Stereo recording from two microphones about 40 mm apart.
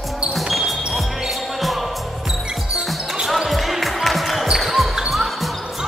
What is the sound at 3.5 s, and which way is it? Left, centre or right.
Basketball bounce, centre.